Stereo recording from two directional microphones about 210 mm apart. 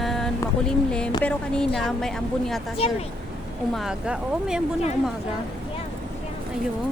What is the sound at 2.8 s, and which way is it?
Speech, 30° left (ahead or behind).